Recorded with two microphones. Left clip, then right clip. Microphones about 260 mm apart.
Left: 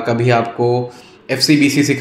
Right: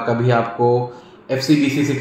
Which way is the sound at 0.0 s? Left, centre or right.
Left.